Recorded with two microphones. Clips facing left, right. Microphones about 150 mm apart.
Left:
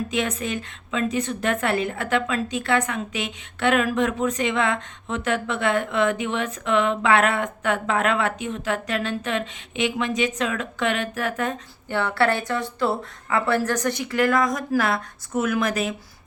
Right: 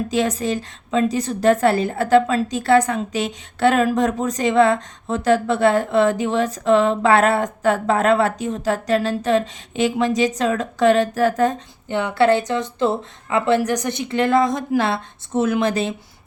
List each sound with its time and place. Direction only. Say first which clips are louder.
0.1 s a woman's voice: right 5 dB; 35° right (ahead or behind)
11.9 s speech: right 5 dB; 20° right (ahead or behind)